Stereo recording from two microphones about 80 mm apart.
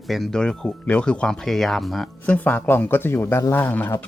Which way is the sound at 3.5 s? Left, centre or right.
Left.